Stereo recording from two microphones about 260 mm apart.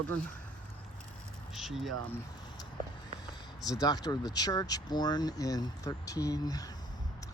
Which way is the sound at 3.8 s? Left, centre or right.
Centre.